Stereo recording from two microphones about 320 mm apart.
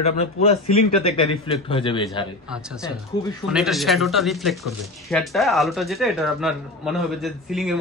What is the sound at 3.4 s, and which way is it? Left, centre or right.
Speech, centre.